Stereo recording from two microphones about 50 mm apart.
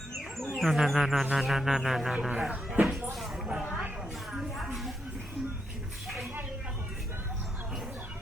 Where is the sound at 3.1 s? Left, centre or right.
Centre.